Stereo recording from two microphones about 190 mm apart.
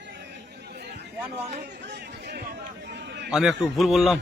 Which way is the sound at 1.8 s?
60° right (ahead or behind).